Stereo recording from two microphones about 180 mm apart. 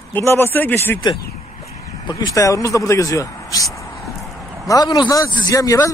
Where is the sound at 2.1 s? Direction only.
20° left (ahead or behind).